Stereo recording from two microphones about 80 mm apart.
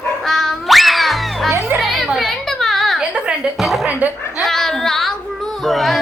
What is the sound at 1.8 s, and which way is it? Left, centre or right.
Children playing, centre.